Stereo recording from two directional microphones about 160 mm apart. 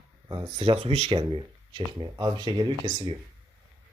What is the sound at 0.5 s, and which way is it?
Speech, 35° right (ahead or behind).